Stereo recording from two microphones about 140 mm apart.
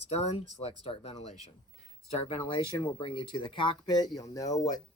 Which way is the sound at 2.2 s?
40° left (ahead or behind).